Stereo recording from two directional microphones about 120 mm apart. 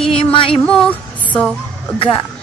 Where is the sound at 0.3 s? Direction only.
45° left (ahead or behind).